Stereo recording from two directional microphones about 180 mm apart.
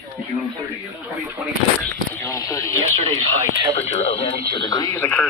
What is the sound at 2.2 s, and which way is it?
Speech, 20° left (ahead or behind).